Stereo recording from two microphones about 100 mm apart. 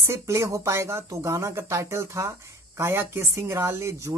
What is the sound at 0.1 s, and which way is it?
Speech, 30° right (ahead or behind).